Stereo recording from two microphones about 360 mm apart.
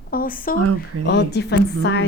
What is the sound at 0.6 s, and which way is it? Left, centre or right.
Speech, right.